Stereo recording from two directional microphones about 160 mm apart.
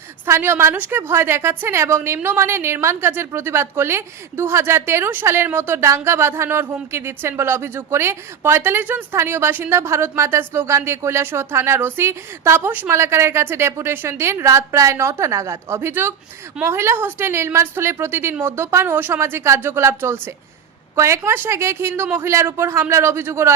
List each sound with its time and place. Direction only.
0.3 s a woman's voice: 15° right (ahead or behind)